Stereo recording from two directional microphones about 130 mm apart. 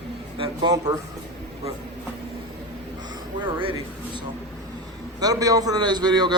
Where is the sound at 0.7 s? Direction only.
30° right (ahead or behind).